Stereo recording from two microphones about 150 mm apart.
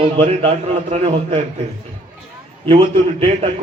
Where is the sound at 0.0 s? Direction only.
40° right (ahead or behind).